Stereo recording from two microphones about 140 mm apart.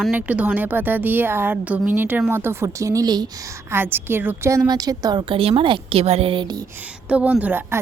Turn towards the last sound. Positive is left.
turn(degrees=-15)  # may be behind; listen again after turning